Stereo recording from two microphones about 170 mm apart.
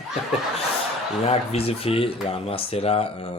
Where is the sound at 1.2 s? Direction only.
40° left (ahead or behind).